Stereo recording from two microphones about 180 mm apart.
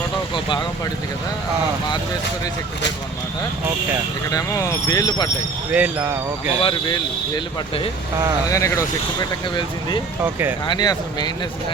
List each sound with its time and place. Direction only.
4.3 s speech: 20° left (ahead or behind)
5.7 s speech: 10° right (ahead or behind)
6.6 s speech: 30° left (ahead or behind)
8.4 s speech: 15° left (ahead or behind)
10.7 s speech: 25° left (ahead or behind)